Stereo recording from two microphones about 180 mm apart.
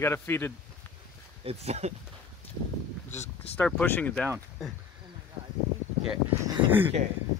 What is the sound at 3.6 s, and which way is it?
Speech, 5° left (ahead or behind).